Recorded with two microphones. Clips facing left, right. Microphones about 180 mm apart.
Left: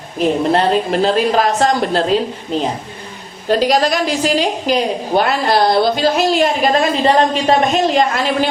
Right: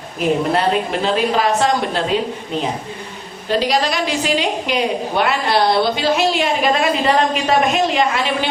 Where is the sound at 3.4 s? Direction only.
45° left (ahead or behind).